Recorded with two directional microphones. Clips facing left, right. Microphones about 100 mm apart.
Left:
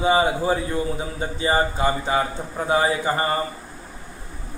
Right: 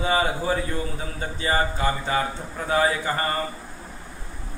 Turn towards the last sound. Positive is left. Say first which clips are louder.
# left 3 dB
turn(degrees=20)  # may be behind; listen again after turning